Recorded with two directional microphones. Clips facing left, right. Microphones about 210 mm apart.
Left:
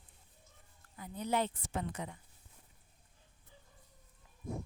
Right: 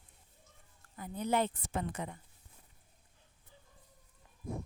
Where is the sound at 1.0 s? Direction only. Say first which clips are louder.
Right 2 dB; 50° right (ahead or behind).